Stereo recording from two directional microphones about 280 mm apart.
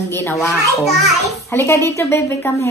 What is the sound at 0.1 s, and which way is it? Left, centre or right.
Speech, centre.